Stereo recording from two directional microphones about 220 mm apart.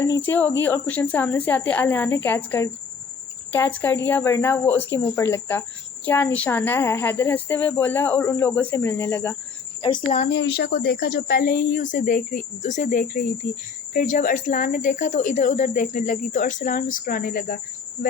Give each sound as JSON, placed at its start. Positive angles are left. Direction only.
{"t": 0.0, "sound": "speech", "side_deg": 10}
{"t": 10.3, "sound": "a woman's voice", "side_deg": 55}